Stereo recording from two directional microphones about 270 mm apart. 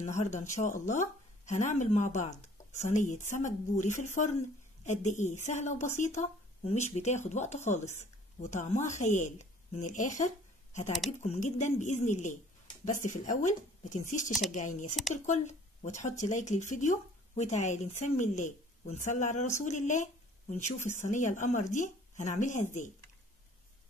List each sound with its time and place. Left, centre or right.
0.2 s a woman's voice: left